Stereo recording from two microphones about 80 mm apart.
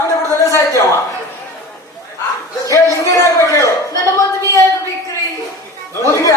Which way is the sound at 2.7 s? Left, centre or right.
Left.